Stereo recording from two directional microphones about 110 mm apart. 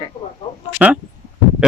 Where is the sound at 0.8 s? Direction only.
10° right (ahead or behind).